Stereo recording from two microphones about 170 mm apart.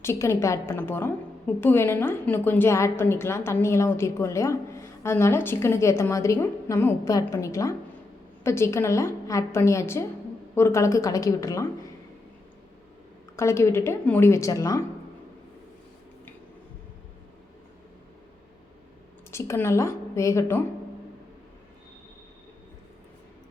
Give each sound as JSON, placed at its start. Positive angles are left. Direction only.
{"t": 0.0, "sound": "a woman's voice", "side_deg": 15}
{"t": 13.3, "sound": "a woman's voice", "side_deg": 15}
{"t": 19.3, "sound": "a woman's voice", "side_deg": 15}